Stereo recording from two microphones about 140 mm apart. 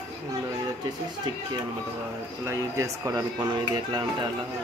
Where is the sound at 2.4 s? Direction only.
20° right (ahead or behind).